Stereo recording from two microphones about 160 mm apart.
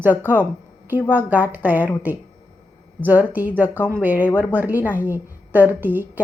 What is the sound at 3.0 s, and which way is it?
A woman's voice, 10° right (ahead or behind).